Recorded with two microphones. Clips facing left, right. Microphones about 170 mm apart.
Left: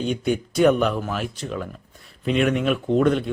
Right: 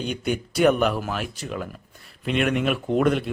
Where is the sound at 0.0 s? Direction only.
Centre (ahead or behind).